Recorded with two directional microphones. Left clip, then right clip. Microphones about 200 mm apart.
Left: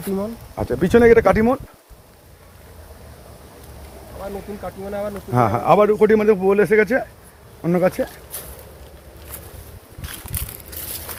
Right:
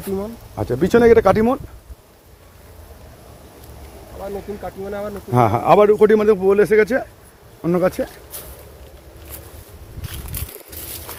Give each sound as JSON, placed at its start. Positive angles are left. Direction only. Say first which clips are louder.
{"t": 0.5, "sound": "a man's voice", "louder": "even", "side_deg": -15}
{"t": 4.6, "sound": "speech", "louder": "left 3 dB", "side_deg": -60}
{"t": 5.3, "sound": "a man's voice", "louder": "right 2 dB", "side_deg": -30}